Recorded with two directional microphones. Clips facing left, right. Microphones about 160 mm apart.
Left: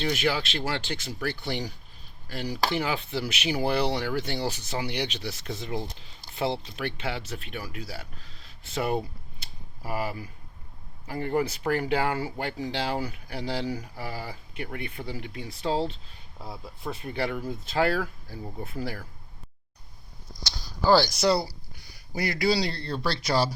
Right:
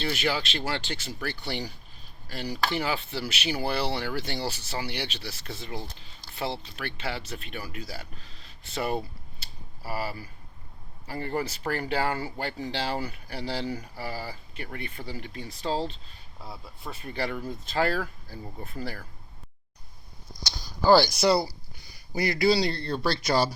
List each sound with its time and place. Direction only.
0.0 s speech: 10° left (ahead or behind)
4.0 s speech: centre (ahead or behind)
4.9 s speech: 15° left (ahead or behind)
8.7 s a sound: 10° left (ahead or behind)
11.0 s speech: 10° left (ahead or behind)
20.4 s speech: centre (ahead or behind)